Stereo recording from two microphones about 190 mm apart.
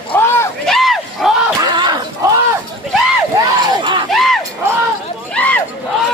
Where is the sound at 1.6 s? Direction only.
25° right (ahead or behind).